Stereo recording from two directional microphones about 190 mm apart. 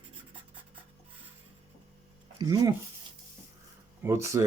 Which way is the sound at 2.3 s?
20° right (ahead or behind).